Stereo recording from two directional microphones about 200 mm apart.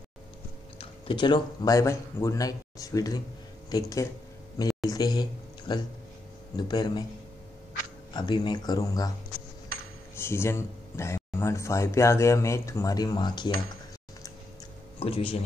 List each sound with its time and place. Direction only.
0.7 s speech: 25° left (ahead or behind)
8.1 s speech: 20° left (ahead or behind)
9.7 s a sound: 50° right (ahead or behind)
10.1 s speech: 10° left (ahead or behind)
15.0 s speech: 25° left (ahead or behind)